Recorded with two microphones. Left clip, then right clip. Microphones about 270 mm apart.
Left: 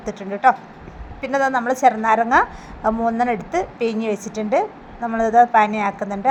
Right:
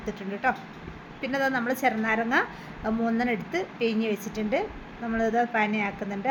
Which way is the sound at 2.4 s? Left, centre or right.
Centre.